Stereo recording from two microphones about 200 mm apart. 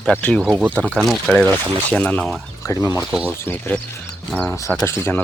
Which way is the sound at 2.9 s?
5° right (ahead or behind).